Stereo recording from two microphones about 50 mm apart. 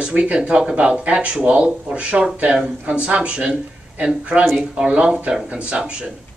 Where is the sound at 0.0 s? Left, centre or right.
Right.